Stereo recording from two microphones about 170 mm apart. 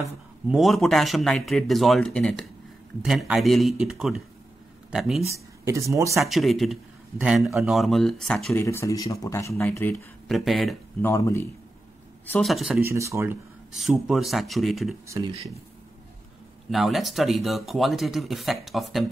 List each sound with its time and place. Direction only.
0.5 s speech: centre (ahead or behind)
5.3 s speech: 20° right (ahead or behind)
6.1 s speech: centre (ahead or behind)
8.5 s speech: 15° left (ahead or behind)
10.2 s speech: centre (ahead or behind)
11.0 s speech: 15° left (ahead or behind)
12.3 s speech: 5° left (ahead or behind)
12.8 s speech: 15° right (ahead or behind)
13.7 s speech: centre (ahead or behind)
15.0 s speech: 20° right (ahead or behind)
16.7 s speech: centre (ahead or behind)